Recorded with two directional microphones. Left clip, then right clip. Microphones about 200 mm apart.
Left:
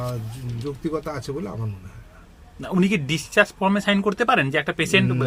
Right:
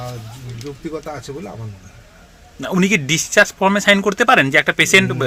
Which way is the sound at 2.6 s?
25° right (ahead or behind).